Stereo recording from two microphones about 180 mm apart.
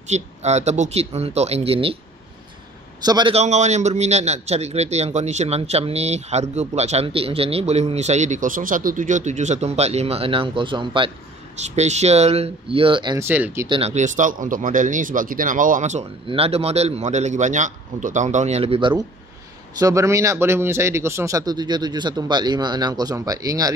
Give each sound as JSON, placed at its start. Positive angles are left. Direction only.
{"t": 0.1, "sound": "a man's voice", "side_deg": -40}
{"t": 3.0, "sound": "speech", "side_deg": -25}
{"t": 3.3, "sound": "a man's voice", "side_deg": -40}
{"t": 11.5, "sound": "a man's voice", "side_deg": -40}
{"t": 13.2, "sound": "speech", "side_deg": -10}
{"t": 13.7, "sound": "a man's voice", "side_deg": -35}
{"t": 19.8, "sound": "speech", "side_deg": -15}